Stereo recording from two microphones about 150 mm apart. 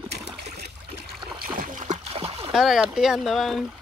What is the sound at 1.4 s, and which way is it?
Splash, 60° right (ahead or behind).